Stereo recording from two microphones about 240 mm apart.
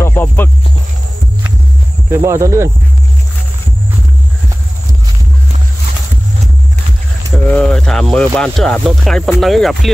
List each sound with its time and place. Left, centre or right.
0.0 s speech: centre
2.0 s speech: centre
7.3 s speech: centre